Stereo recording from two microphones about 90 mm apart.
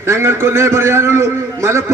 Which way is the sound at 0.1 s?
30° right (ahead or behind).